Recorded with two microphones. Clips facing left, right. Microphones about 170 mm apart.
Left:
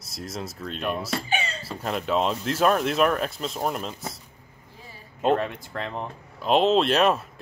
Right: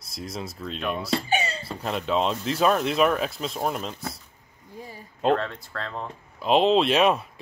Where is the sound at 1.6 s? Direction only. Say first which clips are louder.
Even; centre (ahead or behind).